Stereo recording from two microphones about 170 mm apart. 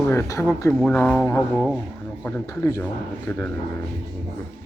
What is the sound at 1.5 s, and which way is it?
Speech, 5° right (ahead or behind).